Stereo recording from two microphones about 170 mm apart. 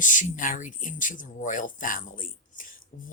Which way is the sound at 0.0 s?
50° left (ahead or behind).